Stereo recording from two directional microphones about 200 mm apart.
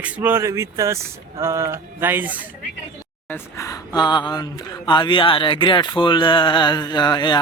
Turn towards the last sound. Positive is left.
turn(degrees=20)  # may be behind; listen again after turning